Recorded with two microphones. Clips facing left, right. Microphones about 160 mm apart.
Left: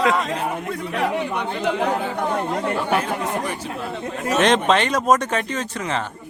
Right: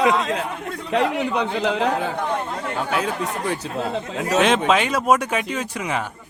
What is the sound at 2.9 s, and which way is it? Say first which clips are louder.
Speech: left 2 dB; 85° right.